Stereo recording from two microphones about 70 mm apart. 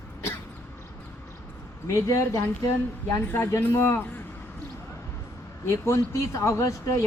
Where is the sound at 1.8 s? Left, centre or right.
Left.